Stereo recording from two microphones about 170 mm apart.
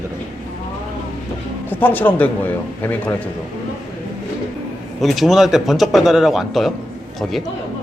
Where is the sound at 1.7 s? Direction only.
10° left (ahead or behind).